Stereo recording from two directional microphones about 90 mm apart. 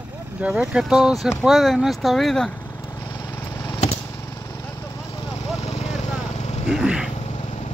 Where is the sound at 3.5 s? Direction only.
35° left (ahead or behind).